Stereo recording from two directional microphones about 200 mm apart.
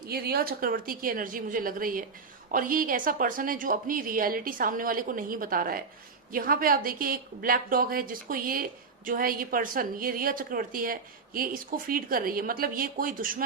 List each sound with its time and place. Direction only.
0.1 s a woman's voice: 50° right (ahead or behind)